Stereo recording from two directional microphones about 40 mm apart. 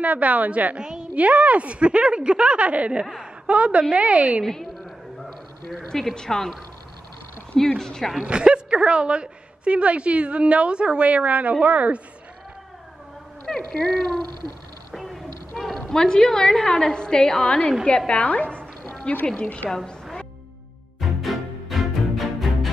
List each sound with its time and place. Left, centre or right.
0.0 s speech: right
0.7 s a woman's voice: centre
1.1 s speech: right
3.0 s a woman's voice: centre
3.4 s speech: right
5.8 s a woman's voice: centre
7.5 s a woman's voice: centre
8.2 s a woman's voice: right
13.5 s speech: centre
15.0 s a sound: centre
15.9 s a woman's voice: centre
19.7 s music: centre